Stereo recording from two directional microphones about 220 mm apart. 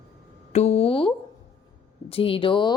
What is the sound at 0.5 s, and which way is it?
Speech, 30° left (ahead or behind).